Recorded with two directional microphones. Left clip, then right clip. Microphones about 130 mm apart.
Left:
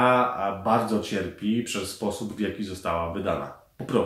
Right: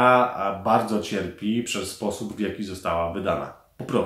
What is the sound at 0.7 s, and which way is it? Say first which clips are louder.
Speech: right 2 dB; 25° right (ahead or behind).